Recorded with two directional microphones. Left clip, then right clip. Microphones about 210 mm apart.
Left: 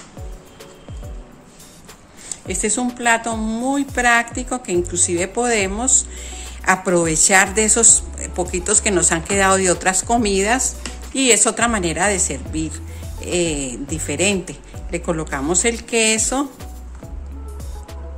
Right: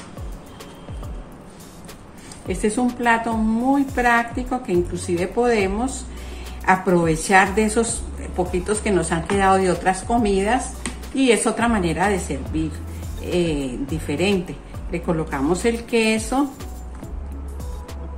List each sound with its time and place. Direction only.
2.4 s speech: 40° left (ahead or behind)